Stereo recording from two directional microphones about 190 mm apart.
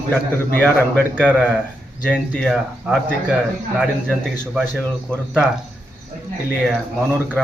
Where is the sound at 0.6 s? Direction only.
5° left (ahead or behind).